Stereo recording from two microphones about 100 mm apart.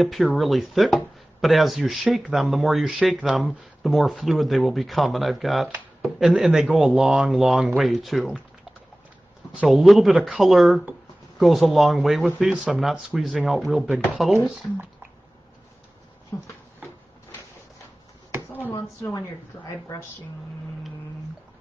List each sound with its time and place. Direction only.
0.0 s speech: centre (ahead or behind)
9.7 s speech: centre (ahead or behind)
16.3 s a sound: 30° left (ahead or behind)
18.7 s a woman's voice: 30° left (ahead or behind)